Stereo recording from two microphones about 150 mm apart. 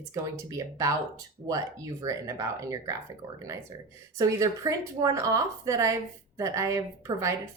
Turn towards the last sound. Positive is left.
turn(degrees=-20)  # may be behind; listen again after turning